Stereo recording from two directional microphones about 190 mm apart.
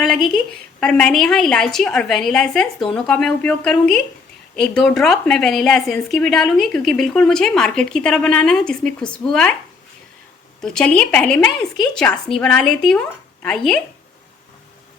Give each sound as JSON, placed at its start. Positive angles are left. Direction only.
{"t": 0.0, "sound": "a woman's voice", "side_deg": 0}
{"t": 10.6, "sound": "a woman's voice", "side_deg": 5}